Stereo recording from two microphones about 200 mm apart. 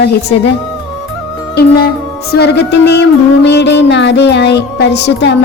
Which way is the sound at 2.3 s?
55° left (ahead or behind).